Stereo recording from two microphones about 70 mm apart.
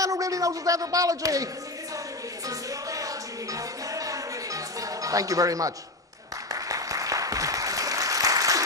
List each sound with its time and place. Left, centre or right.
0.0 s a man's voice: right
2.4 s music: right
6.5 s applause: right